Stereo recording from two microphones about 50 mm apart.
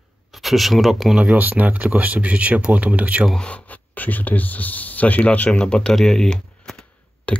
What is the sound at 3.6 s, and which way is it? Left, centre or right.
Speech, left.